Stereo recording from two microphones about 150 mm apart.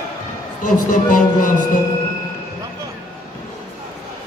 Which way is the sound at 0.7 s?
60° left (ahead or behind).